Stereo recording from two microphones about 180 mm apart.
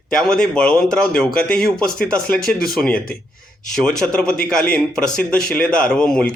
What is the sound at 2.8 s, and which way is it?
Speech, 5° left (ahead or behind).